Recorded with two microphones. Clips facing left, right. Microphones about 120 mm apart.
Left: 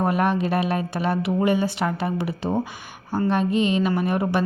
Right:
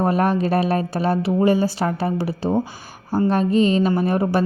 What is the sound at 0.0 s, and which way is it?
A woman's voice, 35° right (ahead or behind).